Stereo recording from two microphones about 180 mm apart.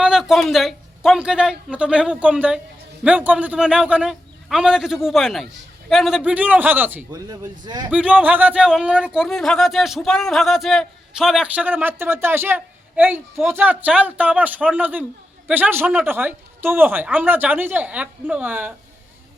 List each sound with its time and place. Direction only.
0.0 s a man's voice: 5° right (ahead or behind)
7.1 s speech: 20° right (ahead or behind)
7.9 s speech: 5° right (ahead or behind)